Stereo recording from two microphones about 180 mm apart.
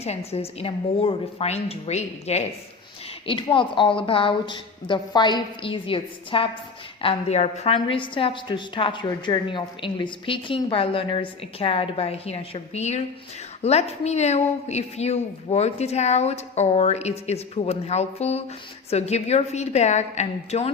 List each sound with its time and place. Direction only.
0.0 s a woman's voice: 35° left (ahead or behind)
3.2 s a woman's voice: 30° left (ahead or behind)